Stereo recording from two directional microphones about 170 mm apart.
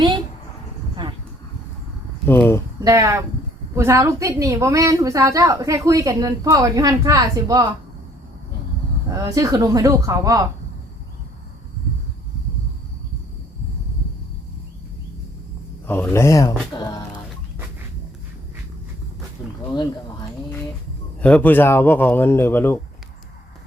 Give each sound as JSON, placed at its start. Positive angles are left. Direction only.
{"t": 2.2, "sound": "speech", "side_deg": 15}
{"t": 2.8, "sound": "a woman's voice", "side_deg": -15}
{"t": 9.1, "sound": "a woman's voice", "side_deg": -20}
{"t": 15.9, "sound": "speech", "side_deg": 15}
{"t": 21.2, "sound": "speech", "side_deg": 10}